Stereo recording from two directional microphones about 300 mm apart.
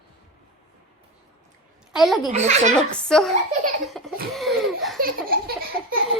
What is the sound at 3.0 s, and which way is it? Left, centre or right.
A woman's voice, centre.